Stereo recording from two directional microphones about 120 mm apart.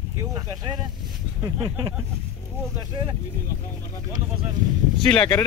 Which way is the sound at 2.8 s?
35° right (ahead or behind).